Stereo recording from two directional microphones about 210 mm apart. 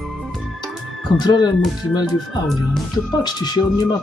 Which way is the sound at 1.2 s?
20° left (ahead or behind).